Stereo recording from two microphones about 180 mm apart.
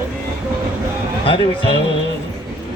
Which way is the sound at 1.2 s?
30° left (ahead or behind).